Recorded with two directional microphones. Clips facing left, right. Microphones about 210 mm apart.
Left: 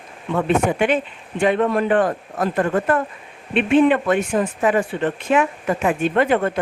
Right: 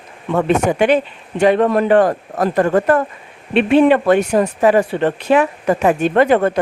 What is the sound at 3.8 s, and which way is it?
Speech, 70° right (ahead or behind).